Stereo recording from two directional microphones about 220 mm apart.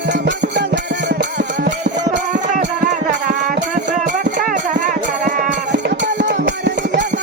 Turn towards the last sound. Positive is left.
turn(degrees=-55)  # may be behind; listen again after turning